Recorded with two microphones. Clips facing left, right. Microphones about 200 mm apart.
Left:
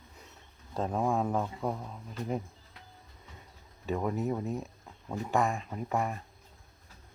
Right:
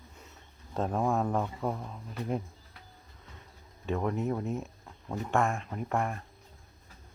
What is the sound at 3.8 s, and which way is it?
Speech, 5° left (ahead or behind).